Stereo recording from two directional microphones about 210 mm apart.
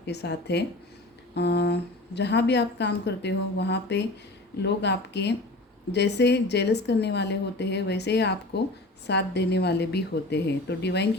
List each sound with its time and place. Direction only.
0.0 s speech: 55° left (ahead or behind)